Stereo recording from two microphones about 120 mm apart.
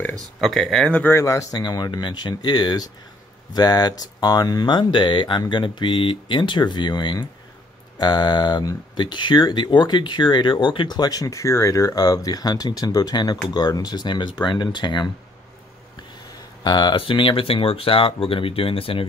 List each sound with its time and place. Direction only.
0.4 s speech: centre (ahead or behind)
1.1 s speech: 25° left (ahead or behind)
16.6 s speech: 35° left (ahead or behind)